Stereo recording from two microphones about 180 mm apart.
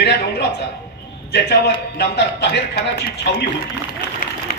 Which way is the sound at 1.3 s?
70° left (ahead or behind).